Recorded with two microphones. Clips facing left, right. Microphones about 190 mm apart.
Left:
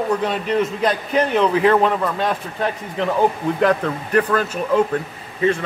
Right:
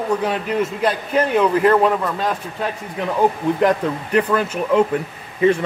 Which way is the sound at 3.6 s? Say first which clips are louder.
Left 1 dB; 15° right (ahead or behind).